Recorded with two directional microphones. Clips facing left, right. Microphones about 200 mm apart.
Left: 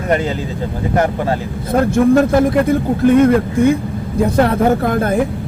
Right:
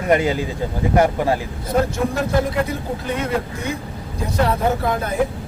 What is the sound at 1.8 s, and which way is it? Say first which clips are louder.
Speech: left 11 dB; 55° left (ahead or behind).